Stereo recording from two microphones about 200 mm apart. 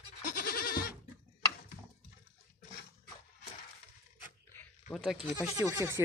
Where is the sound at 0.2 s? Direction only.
45° left (ahead or behind).